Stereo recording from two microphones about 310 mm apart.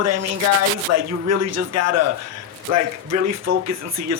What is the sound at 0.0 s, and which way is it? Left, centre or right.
Speech, right.